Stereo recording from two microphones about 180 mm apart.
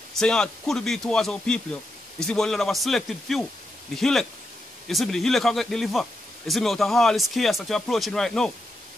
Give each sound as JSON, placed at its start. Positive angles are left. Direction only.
{"t": 0.1, "sound": "speech", "side_deg": 5}